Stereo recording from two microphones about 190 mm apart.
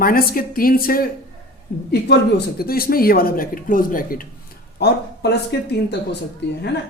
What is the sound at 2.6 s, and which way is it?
Speech, 50° left (ahead or behind).